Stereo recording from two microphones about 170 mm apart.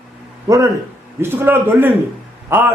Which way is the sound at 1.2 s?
10° right (ahead or behind).